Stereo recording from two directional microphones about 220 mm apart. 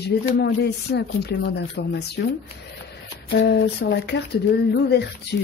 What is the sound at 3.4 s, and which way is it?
Speech, 50° left (ahead or behind).